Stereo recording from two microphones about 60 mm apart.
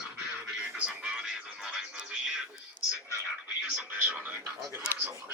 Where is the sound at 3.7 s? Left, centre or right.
Right.